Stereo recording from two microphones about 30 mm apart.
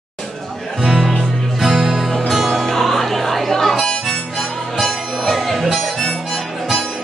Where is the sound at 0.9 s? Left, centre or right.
Centre.